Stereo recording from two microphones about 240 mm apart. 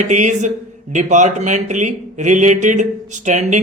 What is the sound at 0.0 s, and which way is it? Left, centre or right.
A man's voice, right.